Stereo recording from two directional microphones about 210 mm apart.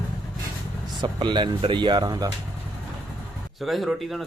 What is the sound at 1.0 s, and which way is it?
Speech, 20° right (ahead or behind).